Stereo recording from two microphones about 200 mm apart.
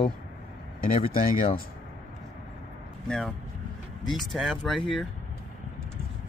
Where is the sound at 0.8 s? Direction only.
45° left (ahead or behind).